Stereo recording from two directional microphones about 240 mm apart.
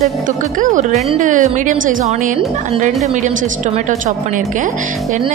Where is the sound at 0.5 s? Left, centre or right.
Right.